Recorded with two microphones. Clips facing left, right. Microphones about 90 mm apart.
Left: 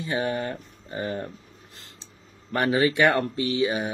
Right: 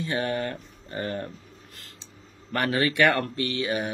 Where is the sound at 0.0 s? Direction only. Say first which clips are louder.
Left 1 dB; 10° left (ahead or behind).